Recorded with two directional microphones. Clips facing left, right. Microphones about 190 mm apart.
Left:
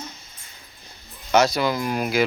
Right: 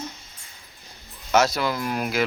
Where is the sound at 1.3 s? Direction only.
5° right (ahead or behind).